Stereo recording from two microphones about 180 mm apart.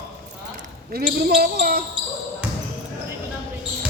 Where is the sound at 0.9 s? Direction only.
55° right (ahead or behind).